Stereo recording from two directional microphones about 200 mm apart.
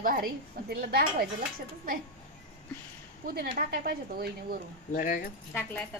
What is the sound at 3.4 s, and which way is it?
A woman's voice, 45° right (ahead or behind).